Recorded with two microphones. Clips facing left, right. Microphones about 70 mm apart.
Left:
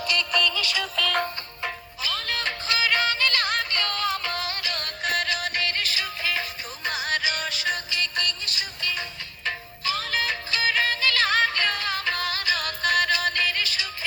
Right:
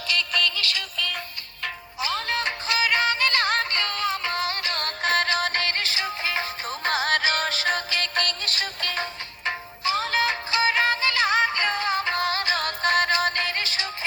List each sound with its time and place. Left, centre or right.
2.0 s music: right
6.7 s music: right
9.5 s music: right
11.6 s music: right